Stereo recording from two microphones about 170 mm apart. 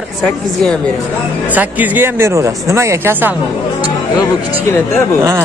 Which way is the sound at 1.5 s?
10° right (ahead or behind).